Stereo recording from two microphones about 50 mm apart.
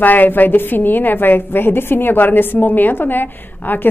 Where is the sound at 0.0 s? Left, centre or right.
Left.